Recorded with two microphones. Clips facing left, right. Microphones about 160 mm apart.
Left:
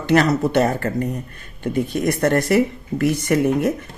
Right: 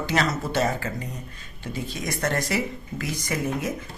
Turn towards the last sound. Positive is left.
turn(degrees=60)  # may be behind; listen again after turning